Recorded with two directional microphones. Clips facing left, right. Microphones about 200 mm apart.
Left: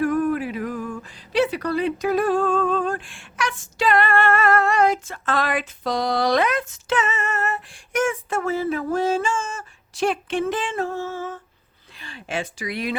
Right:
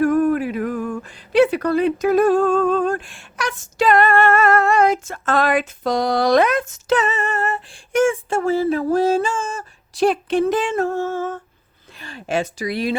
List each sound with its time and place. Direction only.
0.0 s speech: 45° right (ahead or behind)